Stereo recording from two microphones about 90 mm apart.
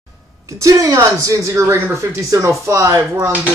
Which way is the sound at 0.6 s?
40° right (ahead or behind).